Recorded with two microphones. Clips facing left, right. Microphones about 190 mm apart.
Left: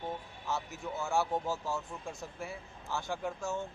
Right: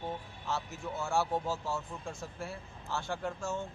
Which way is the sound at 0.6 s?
Centre (ahead or behind).